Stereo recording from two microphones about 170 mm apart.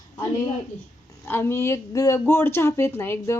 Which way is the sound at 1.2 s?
15° left (ahead or behind).